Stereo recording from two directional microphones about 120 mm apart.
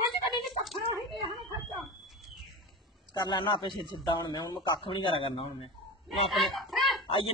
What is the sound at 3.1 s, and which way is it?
Speech, 40° left (ahead or behind).